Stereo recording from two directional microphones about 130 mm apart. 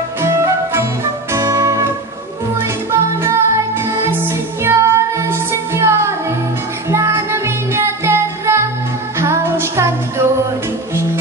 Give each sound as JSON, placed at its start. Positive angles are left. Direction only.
{"t": 0.2, "sound": "music", "side_deg": -20}
{"t": 2.9, "sound": "music", "side_deg": -20}